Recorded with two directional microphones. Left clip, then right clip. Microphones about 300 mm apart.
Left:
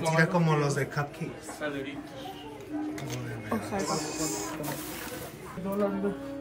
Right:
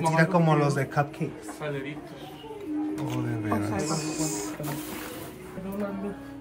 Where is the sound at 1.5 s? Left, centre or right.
Right.